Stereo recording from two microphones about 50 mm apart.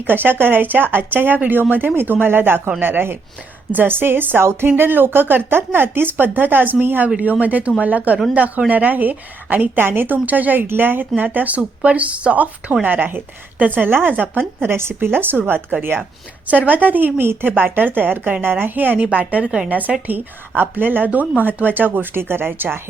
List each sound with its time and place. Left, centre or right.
0.1 s a woman's voice: right
16.5 s a woman's voice: right
19.1 s speech: right
19.7 s a woman's voice: right